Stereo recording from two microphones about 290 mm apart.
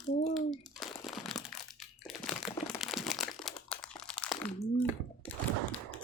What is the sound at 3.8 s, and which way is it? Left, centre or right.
Crunch, centre.